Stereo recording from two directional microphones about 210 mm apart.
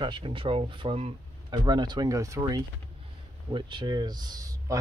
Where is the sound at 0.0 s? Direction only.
25° right (ahead or behind).